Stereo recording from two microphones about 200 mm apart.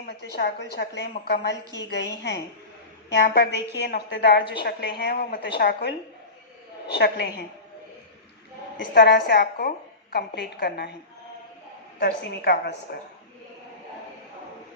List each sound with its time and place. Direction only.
0.0 s a woman's voice: 55° left (ahead or behind)
3.1 s a woman's voice: 55° left (ahead or behind)
6.9 s a woman's voice: 55° left (ahead or behind)
9.0 s a woman's voice: 55° left (ahead or behind)
11.9 s a woman's voice: 55° left (ahead or behind)